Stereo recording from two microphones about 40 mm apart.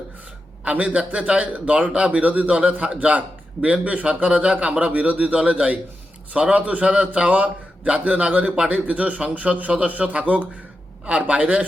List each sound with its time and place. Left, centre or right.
0.7 s a man's voice: right
2.2 s a man's voice: right
11.0 s a man's voice: right